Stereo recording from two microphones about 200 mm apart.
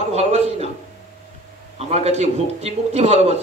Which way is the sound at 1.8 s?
30° right (ahead or behind).